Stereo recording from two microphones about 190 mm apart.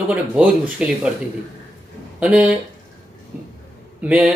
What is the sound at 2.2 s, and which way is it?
Speech, 5° right (ahead or behind).